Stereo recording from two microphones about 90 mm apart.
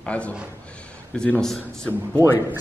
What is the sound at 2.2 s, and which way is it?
Speech, 25° right (ahead or behind).